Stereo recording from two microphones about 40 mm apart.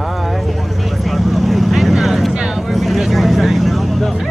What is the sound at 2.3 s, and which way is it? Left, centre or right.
Vehicle, right.